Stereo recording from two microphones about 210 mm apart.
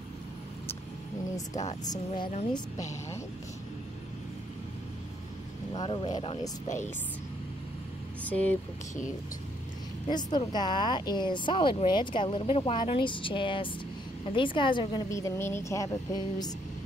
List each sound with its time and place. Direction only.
1.9 s speech: 25° left (ahead or behind)
5.8 s speech: 20° left (ahead or behind)
8.2 s speech: 5° left (ahead or behind)
10.0 s a woman's voice: 20° left (ahead or behind)